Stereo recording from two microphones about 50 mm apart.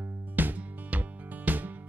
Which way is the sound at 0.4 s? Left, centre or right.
Right.